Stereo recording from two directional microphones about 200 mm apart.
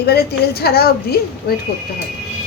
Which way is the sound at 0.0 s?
50° left (ahead or behind).